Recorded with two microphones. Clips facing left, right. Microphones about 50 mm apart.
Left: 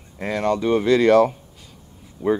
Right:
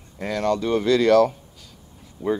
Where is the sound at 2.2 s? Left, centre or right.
Centre.